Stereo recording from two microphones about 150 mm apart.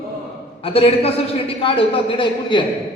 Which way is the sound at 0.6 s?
40° left (ahead or behind).